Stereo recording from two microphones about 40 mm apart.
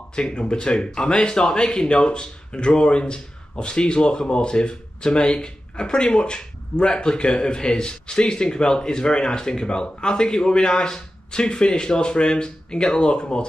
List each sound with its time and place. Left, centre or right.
0.1 s speech: left